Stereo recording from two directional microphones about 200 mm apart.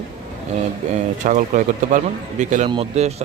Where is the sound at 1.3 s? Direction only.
40° right (ahead or behind).